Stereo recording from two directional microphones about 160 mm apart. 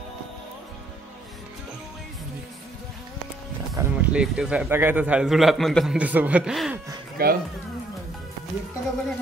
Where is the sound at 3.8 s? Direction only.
20° right (ahead or behind).